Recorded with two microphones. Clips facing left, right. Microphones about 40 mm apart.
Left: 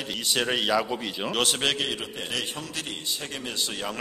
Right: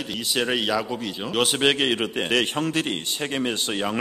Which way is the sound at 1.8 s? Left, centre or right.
Right.